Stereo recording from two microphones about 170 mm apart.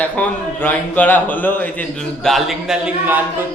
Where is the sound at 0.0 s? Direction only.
10° left (ahead or behind).